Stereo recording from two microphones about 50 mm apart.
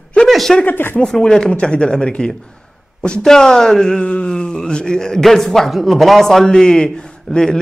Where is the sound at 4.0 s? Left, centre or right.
Left.